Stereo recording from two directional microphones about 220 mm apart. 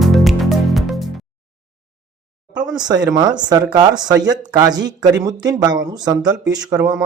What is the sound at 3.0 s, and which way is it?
Speech, 15° right (ahead or behind).